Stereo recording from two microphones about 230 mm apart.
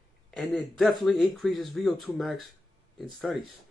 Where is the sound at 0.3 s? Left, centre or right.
Centre.